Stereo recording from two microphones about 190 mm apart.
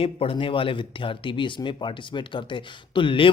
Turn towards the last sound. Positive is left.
turn(degrees=25)  # may be behind; listen again after turning